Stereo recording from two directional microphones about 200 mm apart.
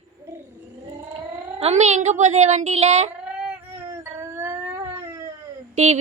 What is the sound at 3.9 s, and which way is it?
Child singing, 10° right (ahead or behind).